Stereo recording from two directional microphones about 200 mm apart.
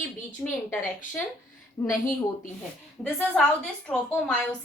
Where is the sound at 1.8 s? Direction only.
15° left (ahead or behind).